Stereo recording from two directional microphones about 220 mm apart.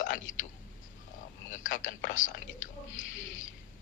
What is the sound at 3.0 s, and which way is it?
Speech, 60° left (ahead or behind).